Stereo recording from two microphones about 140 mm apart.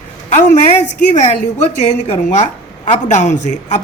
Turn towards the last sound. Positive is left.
turn(degrees=60)  # may be behind; listen again after turning